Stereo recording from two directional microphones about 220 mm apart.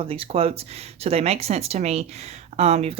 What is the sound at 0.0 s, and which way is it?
Speech, 25° right (ahead or behind).